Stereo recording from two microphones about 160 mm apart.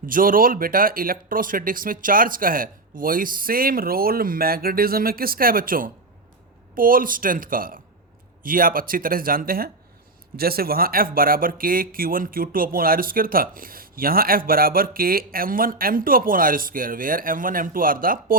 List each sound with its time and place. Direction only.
0.0 s speech: 60° right (ahead or behind)